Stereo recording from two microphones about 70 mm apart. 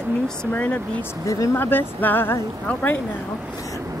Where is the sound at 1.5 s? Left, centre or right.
Left.